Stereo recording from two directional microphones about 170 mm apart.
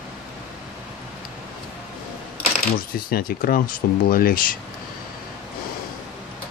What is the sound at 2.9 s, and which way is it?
Speech, 60° left (ahead or behind).